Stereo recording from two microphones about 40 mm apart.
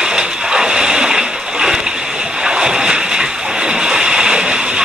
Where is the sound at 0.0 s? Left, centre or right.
Centre.